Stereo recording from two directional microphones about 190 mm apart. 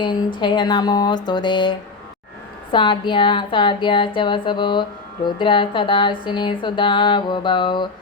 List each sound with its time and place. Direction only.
0.0 s speech: 25° left (ahead or behind)
2.7 s speech: 25° left (ahead or behind)